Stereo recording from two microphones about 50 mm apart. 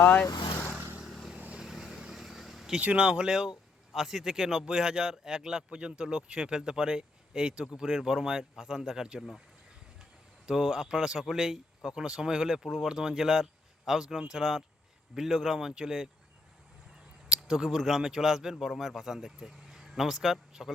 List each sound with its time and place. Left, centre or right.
1.0 s vehicle: centre
2.8 s speech: right
10.4 s speech: centre
17.2 s a man's voice: centre